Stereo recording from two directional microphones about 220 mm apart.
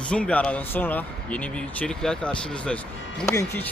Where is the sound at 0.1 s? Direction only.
5° left (ahead or behind).